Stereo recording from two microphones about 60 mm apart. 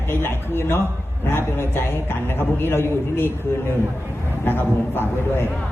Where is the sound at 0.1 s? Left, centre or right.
Left.